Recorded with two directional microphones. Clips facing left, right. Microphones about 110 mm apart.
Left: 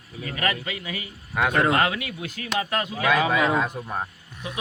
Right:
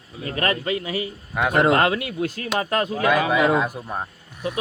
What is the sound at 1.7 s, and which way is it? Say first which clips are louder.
A man's voice: right 4 dB; 40° right (ahead or behind).